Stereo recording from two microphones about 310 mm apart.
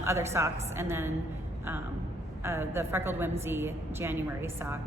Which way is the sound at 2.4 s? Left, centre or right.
Centre.